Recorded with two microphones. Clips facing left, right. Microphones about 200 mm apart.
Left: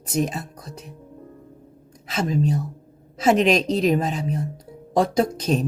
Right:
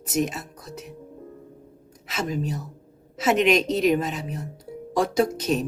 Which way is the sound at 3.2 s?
35° left (ahead or behind).